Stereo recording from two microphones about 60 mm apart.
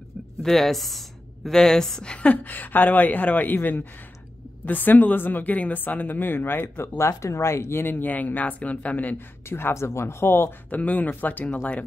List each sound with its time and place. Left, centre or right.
0.4 s speech: centre
2.2 s speech: left
7.0 s speech: left
9.5 s speech: left
10.7 s speech: left